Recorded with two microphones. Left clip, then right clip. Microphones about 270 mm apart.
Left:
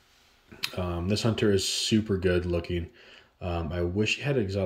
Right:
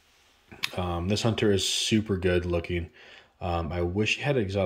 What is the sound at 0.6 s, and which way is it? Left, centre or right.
Speech, centre.